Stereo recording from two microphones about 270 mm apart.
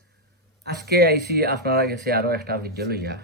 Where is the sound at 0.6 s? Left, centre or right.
Right.